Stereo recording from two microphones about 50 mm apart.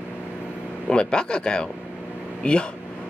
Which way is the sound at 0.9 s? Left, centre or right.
Centre.